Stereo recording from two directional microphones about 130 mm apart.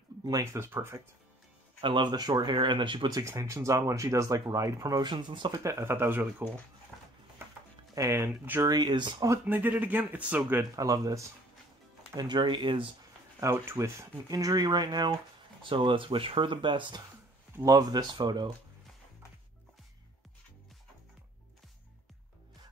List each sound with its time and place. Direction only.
0.2 s speech: 25° right (ahead or behind)
1.8 s speech: 40° right (ahead or behind)
5.6 s speech: 25° right (ahead or behind)
7.9 s speech: 25° right (ahead or behind)
8.6 s speech: 30° right (ahead or behind)
9.3 s speech: 15° right (ahead or behind)
10.8 s speech: 25° right (ahead or behind)
13.4 s speech: 20° right (ahead or behind); by 18.5 s 35° right (ahead or behind)